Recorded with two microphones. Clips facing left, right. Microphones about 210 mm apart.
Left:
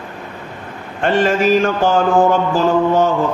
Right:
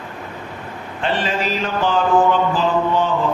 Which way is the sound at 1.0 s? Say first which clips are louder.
Left 7 dB; 50° left (ahead or behind).